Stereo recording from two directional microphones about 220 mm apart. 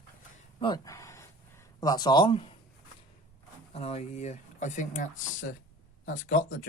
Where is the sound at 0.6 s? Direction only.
15° left (ahead or behind).